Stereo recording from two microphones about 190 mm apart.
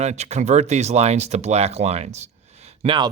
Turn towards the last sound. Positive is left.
turn(degrees=-25)  # may be behind; listen again after turning